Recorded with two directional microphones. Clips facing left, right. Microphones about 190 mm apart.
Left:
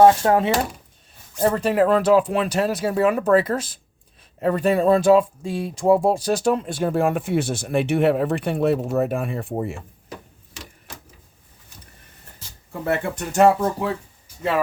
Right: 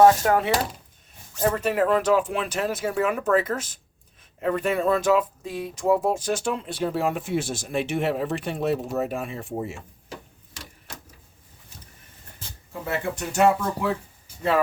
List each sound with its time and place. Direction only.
0.0 s speech: 30° left (ahead or behind); by 9.7 s 55° left (ahead or behind)
12.8 s speech: 55° left (ahead or behind)